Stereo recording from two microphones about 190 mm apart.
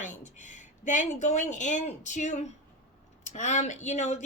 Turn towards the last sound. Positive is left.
turn(degrees=40)  # may be behind; listen again after turning